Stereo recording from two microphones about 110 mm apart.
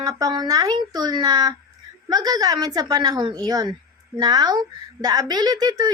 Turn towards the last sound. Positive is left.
turn(degrees=-35)  # may be behind; listen again after turning